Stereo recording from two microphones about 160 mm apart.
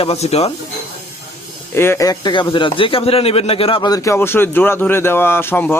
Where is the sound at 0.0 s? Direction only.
40° left (ahead or behind).